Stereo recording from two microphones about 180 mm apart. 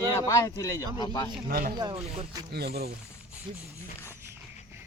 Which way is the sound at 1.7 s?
25° right (ahead or behind).